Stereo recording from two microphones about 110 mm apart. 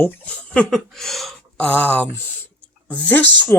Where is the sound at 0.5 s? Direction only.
10° left (ahead or behind).